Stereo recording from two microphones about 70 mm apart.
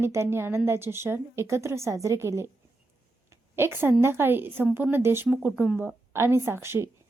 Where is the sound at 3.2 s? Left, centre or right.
Right.